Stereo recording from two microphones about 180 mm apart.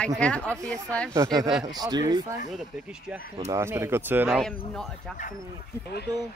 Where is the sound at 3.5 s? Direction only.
15° right (ahead or behind).